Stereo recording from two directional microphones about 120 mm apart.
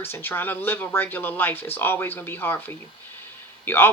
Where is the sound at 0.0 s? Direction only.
20° left (ahead or behind).